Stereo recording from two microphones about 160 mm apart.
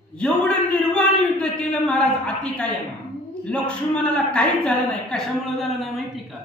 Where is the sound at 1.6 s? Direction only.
5° left (ahead or behind).